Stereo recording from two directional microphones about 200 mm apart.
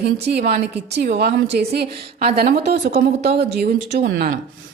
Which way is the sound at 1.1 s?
45° right (ahead or behind).